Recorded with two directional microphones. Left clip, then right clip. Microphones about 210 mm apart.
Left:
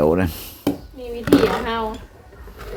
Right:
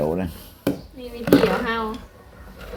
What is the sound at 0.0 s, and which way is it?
Chopping, 35° left (ahead or behind).